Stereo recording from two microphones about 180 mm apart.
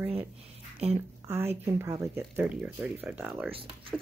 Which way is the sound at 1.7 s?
15° right (ahead or behind).